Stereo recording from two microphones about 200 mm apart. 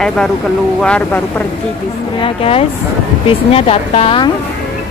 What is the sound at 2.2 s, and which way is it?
Speech, 30° left (ahead or behind).